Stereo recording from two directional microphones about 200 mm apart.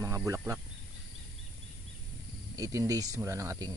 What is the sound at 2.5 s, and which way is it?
Speech, 15° right (ahead or behind).